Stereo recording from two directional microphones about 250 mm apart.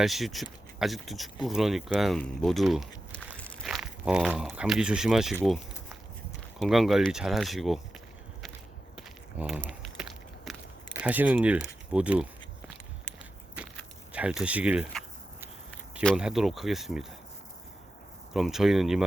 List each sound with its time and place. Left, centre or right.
0.0 s speech: centre
6.6 s speech: centre
9.0 s a sound: centre
10.9 s speech: centre
11.9 s a sound: centre
13.6 s walk: centre
14.1 s speech: centre
18.3 s speech: centre